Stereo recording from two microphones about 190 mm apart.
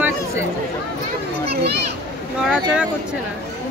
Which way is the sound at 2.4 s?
5° right (ahead or behind).